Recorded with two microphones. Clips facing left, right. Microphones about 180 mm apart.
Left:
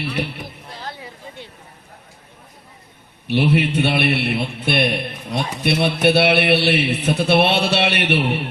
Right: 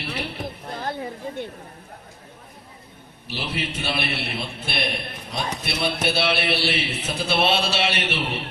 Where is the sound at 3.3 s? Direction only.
60° left (ahead or behind).